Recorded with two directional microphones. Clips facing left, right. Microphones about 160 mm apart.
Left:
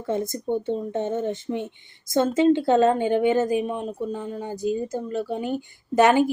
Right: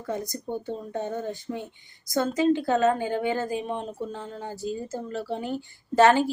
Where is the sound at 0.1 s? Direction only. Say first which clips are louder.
Left 6 dB; 25° left (ahead or behind).